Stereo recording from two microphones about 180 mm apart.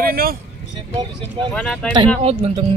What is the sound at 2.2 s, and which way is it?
Speech, 35° right (ahead or behind).